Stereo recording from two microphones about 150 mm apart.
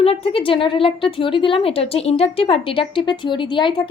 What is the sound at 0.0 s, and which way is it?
A woman's voice, 40° left (ahead or behind).